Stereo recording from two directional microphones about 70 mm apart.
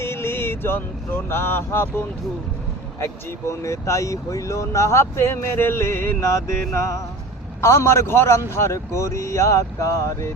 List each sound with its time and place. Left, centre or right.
0.0 s a man's voice: left